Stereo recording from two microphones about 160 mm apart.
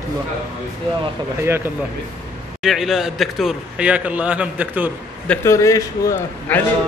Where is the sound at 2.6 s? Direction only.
Centre (ahead or behind).